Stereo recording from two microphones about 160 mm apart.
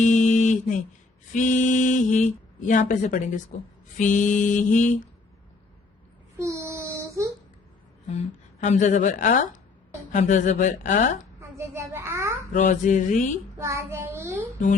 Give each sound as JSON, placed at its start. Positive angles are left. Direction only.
{"t": 0.0, "sound": "mantra", "side_deg": 50}
{"t": 1.3, "sound": "speech", "side_deg": 50}
{"t": 6.4, "sound": "child singing", "side_deg": -15}
{"t": 8.6, "sound": "speech", "side_deg": 50}
{"t": 11.3, "sound": "a sound", "side_deg": -15}
{"t": 12.5, "sound": "speech", "side_deg": 50}
{"t": 13.6, "sound": "child singing", "side_deg": -15}